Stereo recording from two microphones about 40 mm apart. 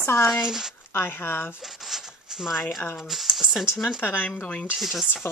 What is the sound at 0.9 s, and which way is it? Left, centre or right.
Speech, left.